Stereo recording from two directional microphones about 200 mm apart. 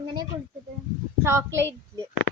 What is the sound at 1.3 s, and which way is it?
Speech, 15° right (ahead or behind).